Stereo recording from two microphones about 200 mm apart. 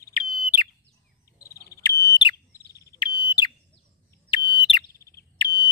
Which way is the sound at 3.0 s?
20° left (ahead or behind).